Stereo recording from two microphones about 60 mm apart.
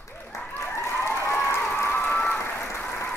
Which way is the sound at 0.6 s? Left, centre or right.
Left.